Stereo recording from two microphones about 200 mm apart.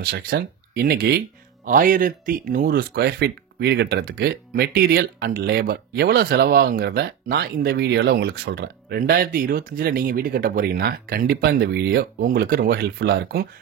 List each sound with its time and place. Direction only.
0.0 s speech: 50° right (ahead or behind)